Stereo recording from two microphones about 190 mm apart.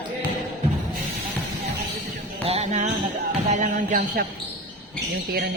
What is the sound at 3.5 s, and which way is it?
Speech, 40° right (ahead or behind).